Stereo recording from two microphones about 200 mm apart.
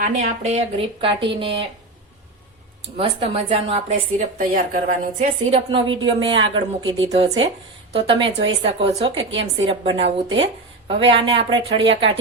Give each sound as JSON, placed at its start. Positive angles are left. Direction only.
{"t": 0.0, "sound": "a woman's voice", "side_deg": -30}
{"t": 3.0, "sound": "a woman's voice", "side_deg": -30}
{"t": 4.4, "sound": "a woman's voice", "side_deg": -45}
{"t": 9.1, "sound": "a woman's voice", "side_deg": -70}
{"t": 9.6, "sound": "a woman's voice", "side_deg": -25}